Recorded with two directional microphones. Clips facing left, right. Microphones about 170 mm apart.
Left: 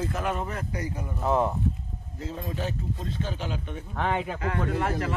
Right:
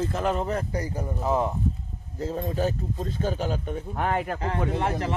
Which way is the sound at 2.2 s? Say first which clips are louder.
Right 6 dB; 40° right (ahead or behind).